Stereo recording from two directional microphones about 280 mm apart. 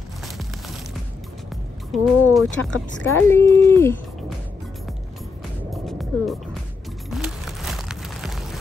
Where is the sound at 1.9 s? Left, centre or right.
Centre.